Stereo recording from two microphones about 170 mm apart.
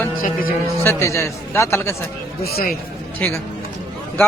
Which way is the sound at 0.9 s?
15° left (ahead or behind).